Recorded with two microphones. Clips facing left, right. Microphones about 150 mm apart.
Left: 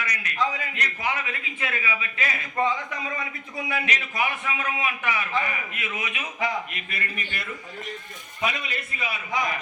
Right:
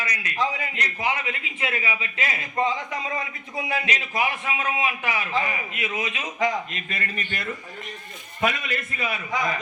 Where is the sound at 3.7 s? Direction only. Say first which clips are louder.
Right 2 dB; 25° right (ahead or behind).